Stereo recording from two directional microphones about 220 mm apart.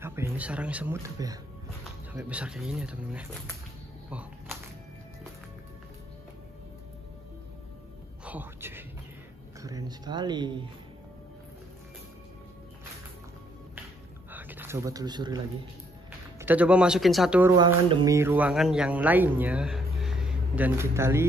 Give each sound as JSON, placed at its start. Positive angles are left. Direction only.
{"t": 0.0, "sound": "speech", "side_deg": -10}
{"t": 4.1, "sound": "shuffling cards", "side_deg": -5}
{"t": 8.3, "sound": "music", "side_deg": -10}
{"t": 9.6, "sound": "speech", "side_deg": -15}
{"t": 14.3, "sound": "speech", "side_deg": -10}
{"t": 16.3, "sound": "speech", "side_deg": -5}
{"t": 17.6, "sound": "speech", "side_deg": -20}